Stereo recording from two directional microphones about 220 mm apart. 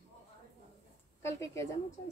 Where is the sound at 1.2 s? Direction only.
15° left (ahead or behind).